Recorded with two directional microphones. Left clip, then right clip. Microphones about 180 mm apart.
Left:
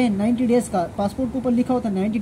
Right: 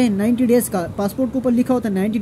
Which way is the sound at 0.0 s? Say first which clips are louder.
Right 3 dB; 15° right (ahead or behind).